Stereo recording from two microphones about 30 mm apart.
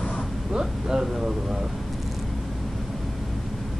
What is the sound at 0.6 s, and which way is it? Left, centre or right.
Speech, right.